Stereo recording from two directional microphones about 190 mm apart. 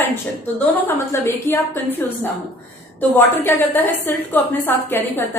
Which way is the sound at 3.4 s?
10° left (ahead or behind).